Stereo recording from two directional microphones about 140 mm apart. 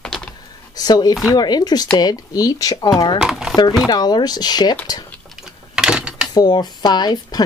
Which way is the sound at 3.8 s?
30° left (ahead or behind).